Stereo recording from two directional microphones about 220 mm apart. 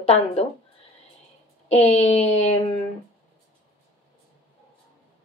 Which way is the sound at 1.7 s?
30° left (ahead or behind).